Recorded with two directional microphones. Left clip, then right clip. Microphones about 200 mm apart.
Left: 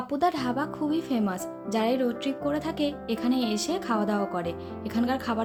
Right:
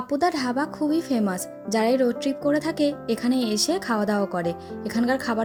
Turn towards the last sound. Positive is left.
turn(degrees=-25)  # may be behind; listen again after turning